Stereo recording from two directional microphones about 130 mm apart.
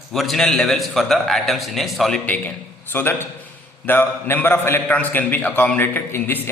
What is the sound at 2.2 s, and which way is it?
A man's voice, 10° left (ahead or behind).